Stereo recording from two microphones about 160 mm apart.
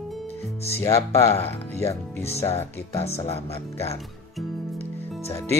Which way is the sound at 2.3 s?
40° left (ahead or behind).